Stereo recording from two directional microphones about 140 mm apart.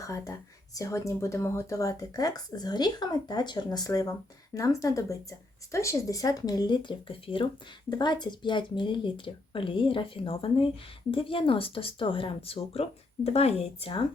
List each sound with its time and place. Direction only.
0.0 s speech: 20° left (ahead or behind); by 14.0 s 45° left (ahead or behind)